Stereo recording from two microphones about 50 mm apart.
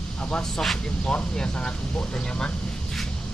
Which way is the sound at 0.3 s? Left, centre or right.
Centre.